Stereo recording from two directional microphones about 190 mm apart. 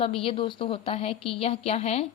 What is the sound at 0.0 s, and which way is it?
A woman's voice, 30° left (ahead or behind).